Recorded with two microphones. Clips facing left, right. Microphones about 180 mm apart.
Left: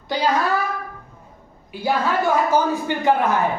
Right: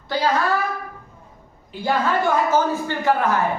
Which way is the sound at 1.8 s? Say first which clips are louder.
Even; 10° left (ahead or behind).